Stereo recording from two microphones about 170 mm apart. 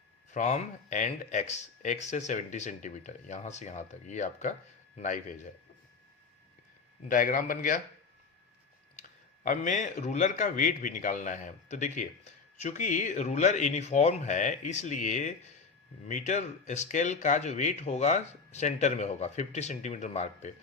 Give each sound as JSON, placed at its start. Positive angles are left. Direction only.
{"t": 0.3, "sound": "speech", "side_deg": 45}
{"t": 7.1, "sound": "speech", "side_deg": 55}
{"t": 9.0, "sound": "speech", "side_deg": 50}